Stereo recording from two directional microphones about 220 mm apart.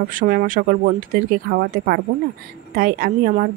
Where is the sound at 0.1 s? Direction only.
40° right (ahead or behind).